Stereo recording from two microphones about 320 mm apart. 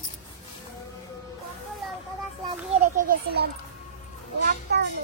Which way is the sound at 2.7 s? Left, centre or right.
Right.